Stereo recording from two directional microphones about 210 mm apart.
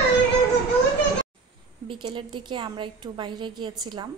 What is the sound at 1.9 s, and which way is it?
A woman's voice, 20° right (ahead or behind).